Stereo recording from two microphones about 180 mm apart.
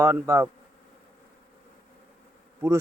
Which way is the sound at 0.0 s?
15° right (ahead or behind).